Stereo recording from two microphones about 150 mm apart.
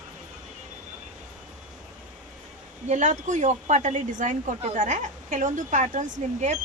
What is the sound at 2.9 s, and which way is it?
Speech, 50° right (ahead or behind).